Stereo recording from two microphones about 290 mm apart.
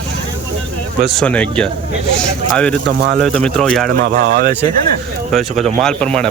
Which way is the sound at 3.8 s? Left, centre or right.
Right.